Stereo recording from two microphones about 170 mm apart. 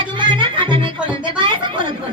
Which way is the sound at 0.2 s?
30° right (ahead or behind).